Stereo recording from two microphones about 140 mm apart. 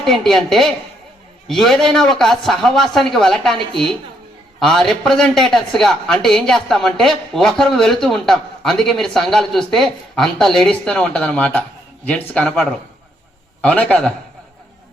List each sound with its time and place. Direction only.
0.0 s speech: centre (ahead or behind)
4.6 s a man's voice: centre (ahead or behind)